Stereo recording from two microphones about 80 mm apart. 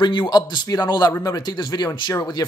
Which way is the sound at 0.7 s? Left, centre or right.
Left.